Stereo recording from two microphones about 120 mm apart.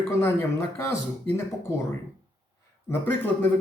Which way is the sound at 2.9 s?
20° left (ahead or behind).